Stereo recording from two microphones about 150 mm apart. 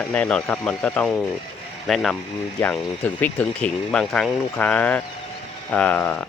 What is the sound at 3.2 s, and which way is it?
Speech, 10° left (ahead or behind).